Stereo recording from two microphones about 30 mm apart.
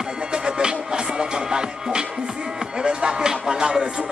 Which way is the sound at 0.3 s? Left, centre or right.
Right.